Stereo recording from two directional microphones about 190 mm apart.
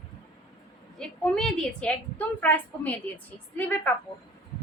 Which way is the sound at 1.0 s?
5° left (ahead or behind).